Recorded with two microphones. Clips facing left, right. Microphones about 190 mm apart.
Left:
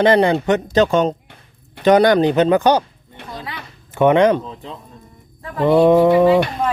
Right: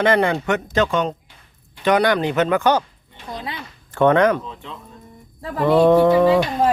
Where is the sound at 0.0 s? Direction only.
30° left (ahead or behind).